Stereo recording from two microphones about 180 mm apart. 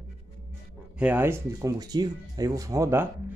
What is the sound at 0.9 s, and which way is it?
Speech, 10° right (ahead or behind).